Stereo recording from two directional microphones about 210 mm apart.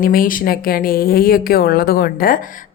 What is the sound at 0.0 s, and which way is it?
A woman's voice, 40° left (ahead or behind).